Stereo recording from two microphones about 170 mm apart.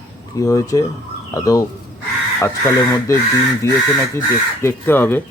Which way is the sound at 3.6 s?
15° left (ahead or behind).